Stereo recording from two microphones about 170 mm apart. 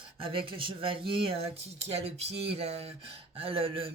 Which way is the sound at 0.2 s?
30° right (ahead or behind).